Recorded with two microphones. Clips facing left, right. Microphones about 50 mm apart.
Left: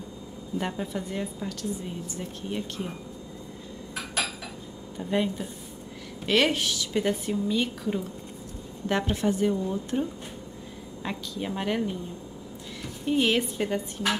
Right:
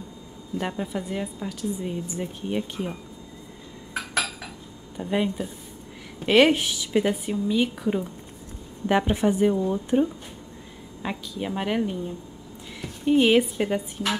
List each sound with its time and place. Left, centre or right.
0.6 s a woman's voice: centre
4.9 s a woman's voice: centre
13.0 s a woman's voice: centre